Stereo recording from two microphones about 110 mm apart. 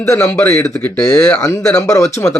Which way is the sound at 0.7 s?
10° left (ahead or behind).